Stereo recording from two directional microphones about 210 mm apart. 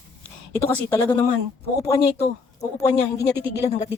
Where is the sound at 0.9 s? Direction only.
10° left (ahead or behind).